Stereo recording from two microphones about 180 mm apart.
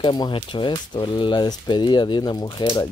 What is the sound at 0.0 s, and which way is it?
Speech, 25° left (ahead or behind).